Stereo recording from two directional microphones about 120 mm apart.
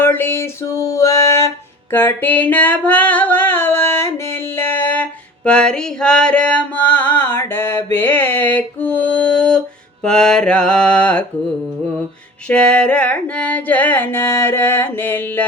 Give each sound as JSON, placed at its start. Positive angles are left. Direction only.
{"t": 0.0, "sound": "music", "side_deg": 20}
{"t": 10.0, "sound": "carnatic music", "side_deg": 5}
{"t": 12.5, "sound": "carnatic music", "side_deg": 10}